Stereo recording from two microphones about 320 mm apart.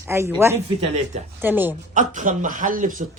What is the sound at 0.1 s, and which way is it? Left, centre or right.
Speech, centre.